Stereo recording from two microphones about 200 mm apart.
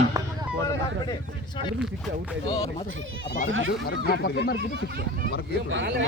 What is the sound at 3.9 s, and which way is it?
Speech, 50° left (ahead or behind).